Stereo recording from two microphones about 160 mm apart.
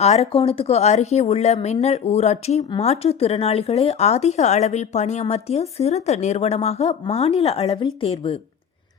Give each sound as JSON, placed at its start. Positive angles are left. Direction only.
{"t": 0.0, "sound": "speech", "side_deg": 40}